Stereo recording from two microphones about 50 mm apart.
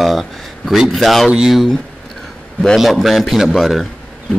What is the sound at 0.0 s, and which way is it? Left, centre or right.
Speech, centre.